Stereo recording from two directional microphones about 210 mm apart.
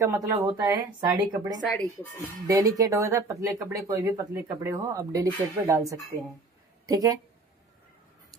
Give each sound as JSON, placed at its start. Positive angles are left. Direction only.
{"t": 0.0, "sound": "speech", "side_deg": -15}